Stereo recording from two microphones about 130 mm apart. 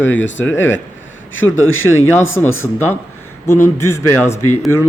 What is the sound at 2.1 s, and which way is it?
Speech, 20° left (ahead or behind).